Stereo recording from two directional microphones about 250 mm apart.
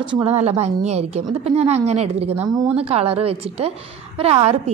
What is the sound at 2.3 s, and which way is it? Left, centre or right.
A woman's voice, centre.